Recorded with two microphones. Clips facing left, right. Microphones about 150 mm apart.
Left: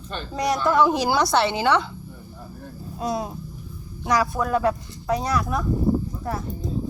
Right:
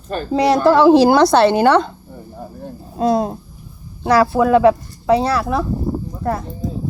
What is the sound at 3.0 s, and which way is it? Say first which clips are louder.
Speech: right 10 dB; 55° right (ahead or behind).